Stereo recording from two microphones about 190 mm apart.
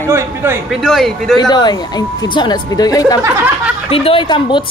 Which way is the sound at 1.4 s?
20° left (ahead or behind).